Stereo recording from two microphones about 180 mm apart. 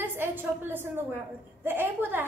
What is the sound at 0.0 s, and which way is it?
A woman's voice, 10° right (ahead or behind).